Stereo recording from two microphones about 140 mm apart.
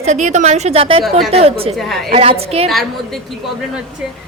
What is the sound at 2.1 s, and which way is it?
Speech, 45° right (ahead or behind).